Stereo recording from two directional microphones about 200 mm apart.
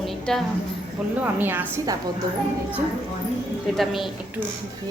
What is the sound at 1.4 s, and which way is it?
Speech, 10° right (ahead or behind).